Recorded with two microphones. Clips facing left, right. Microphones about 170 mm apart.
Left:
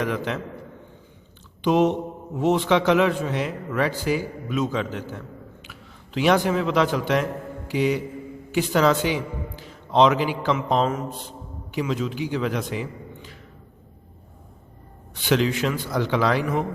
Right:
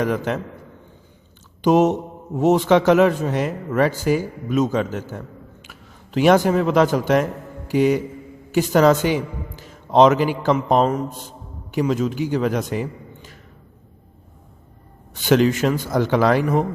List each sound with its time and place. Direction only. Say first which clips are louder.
0.0 s a man's voice: right 4 dB; 45° right (ahead or behind)
1.6 s a man's voice: right 4 dB; 45° right (ahead or behind)
15.1 s a man's voice: right 5 dB; 45° right (ahead or behind)